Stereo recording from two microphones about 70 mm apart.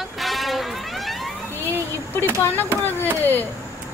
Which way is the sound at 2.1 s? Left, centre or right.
Left.